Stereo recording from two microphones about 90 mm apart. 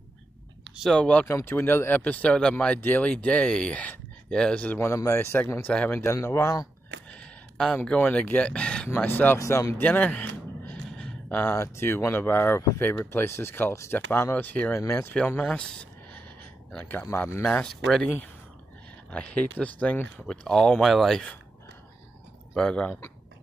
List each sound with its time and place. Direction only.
0.9 s speech: 15° left (ahead or behind)
1.2 s speech: 25° left (ahead or behind); by 4.7 s 10° left (ahead or behind)
4.7 s speech: 35° left (ahead or behind)
5.7 s speech: 10° left (ahead or behind)
5.9 s speech: 30° left (ahead or behind)
7.1 s speech: 10° left (ahead or behind)
8.9 s speech: 20° left (ahead or behind)
9.4 s speech: 35° left (ahead or behind)
9.8 s gasp: 20° left (ahead or behind)
11.4 s speech: 30° left (ahead or behind)
17.5 s speech: 5° left (ahead or behind)
19.1 s speech: 15° left (ahead or behind)
22.6 s speech: 10° left (ahead or behind)